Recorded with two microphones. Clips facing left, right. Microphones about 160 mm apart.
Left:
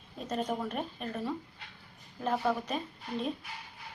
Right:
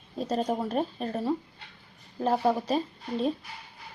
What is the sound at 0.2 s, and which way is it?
Speech, 35° right (ahead or behind).